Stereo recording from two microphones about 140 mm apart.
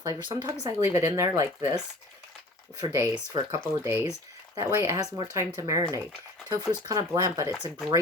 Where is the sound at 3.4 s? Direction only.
35° right (ahead or behind).